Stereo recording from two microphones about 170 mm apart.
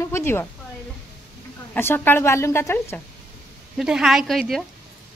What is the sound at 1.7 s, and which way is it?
Speech, 10° left (ahead or behind).